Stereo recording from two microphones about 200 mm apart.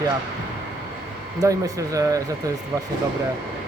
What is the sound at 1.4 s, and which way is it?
Speech, 15° right (ahead or behind).